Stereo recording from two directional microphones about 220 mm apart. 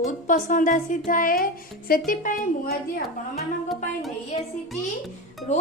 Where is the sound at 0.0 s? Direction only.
35° left (ahead or behind).